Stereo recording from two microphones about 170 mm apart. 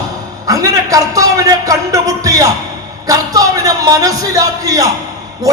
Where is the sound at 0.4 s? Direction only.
20° right (ahead or behind).